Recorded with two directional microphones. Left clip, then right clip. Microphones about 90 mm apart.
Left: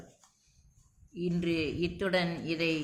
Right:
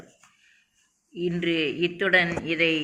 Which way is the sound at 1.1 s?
30° left (ahead or behind).